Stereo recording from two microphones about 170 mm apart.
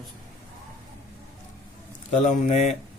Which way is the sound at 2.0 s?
45° left (ahead or behind).